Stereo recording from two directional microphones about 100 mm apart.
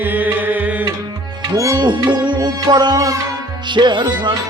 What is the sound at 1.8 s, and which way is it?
Music, 50° right (ahead or behind).